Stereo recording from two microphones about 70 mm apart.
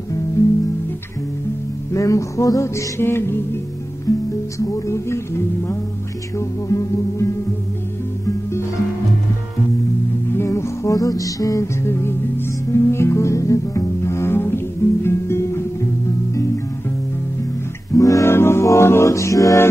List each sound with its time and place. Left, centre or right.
0.4 s music: left
2.0 s music: left
4.1 s music: left
10.3 s music: left
17.9 s music: left
18.3 s music: left